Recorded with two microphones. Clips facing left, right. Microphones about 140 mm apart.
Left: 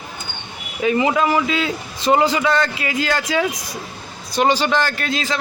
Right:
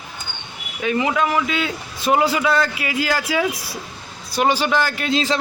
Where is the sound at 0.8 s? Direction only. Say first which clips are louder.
Left 3 dB; 5° left (ahead or behind).